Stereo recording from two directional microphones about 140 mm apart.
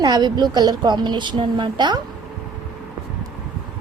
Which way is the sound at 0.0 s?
30° right (ahead or behind).